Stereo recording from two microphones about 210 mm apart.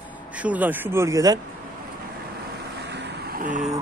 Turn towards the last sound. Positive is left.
turn(degrees=-35)  # may be behind; listen again after turning